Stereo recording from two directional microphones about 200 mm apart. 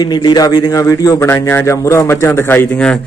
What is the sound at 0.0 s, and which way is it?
A man's voice, 20° left (ahead or behind).